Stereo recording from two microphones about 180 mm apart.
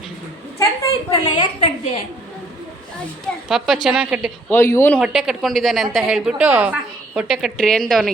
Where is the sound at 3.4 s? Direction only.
5° right (ahead or behind).